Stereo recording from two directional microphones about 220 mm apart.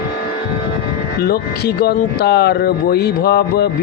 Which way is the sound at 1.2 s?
45° left (ahead or behind).